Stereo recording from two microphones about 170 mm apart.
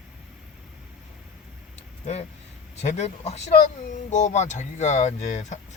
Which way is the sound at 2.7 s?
40° left (ahead or behind).